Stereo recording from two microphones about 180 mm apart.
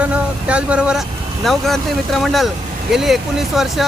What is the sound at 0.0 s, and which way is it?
Speech, 5° right (ahead or behind).